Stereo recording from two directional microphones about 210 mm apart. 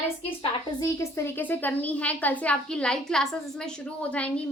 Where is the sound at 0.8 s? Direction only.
15° left (ahead or behind).